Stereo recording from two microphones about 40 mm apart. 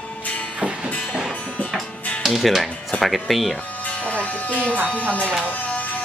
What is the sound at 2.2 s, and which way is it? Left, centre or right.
Speech, centre.